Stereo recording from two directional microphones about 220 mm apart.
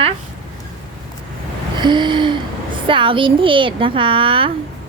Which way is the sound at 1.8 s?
20° right (ahead or behind).